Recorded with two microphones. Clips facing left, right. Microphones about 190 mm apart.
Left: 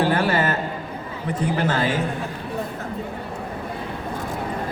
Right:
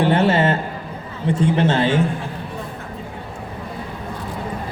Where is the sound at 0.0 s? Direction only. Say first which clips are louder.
Right 4 dB; 25° right (ahead or behind).